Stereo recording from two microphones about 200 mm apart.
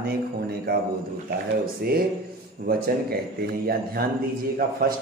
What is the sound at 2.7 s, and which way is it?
Speech, 50° right (ahead or behind).